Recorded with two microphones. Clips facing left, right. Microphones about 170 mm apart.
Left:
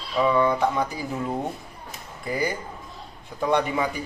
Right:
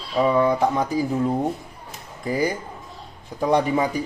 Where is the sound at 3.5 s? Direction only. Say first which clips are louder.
Right 3 dB; 40° right (ahead or behind).